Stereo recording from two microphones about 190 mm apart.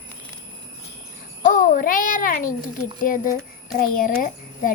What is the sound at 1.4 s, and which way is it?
A child's voice, 45° left (ahead or behind).